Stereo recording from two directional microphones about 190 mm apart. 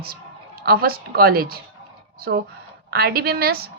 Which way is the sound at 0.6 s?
50° right (ahead or behind).